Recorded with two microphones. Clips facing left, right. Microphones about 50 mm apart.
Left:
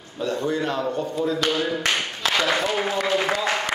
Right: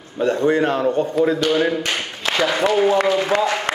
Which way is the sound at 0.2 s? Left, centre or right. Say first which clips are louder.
Right 7 dB; right.